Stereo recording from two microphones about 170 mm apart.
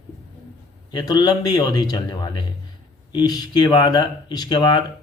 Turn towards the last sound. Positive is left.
turn(degrees=25)  # may be behind; listen again after turning